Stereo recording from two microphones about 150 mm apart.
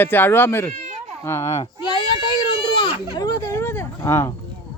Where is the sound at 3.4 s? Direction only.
15° left (ahead or behind).